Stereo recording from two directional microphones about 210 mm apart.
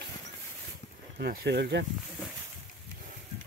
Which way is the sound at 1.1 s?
45° right (ahead or behind).